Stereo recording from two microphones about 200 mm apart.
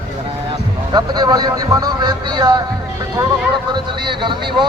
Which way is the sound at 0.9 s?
20° right (ahead or behind).